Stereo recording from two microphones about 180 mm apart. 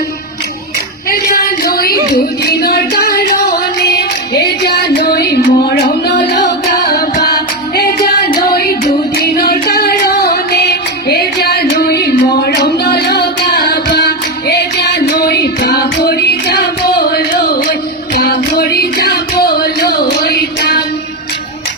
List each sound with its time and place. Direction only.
1.1 s a sound: 55° left (ahead or behind)
2.4 s music: 60° left (ahead or behind)
18.1 s music: 60° left (ahead or behind)